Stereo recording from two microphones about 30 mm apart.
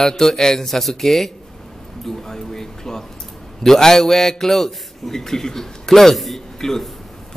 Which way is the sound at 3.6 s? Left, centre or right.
Centre.